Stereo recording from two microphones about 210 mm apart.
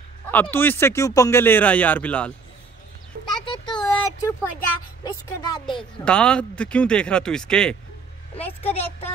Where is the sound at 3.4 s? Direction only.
25° left (ahead or behind).